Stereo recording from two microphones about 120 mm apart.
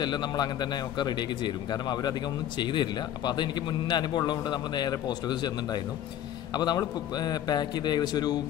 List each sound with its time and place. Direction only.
0.0 s a man's voice: 35° left (ahead or behind)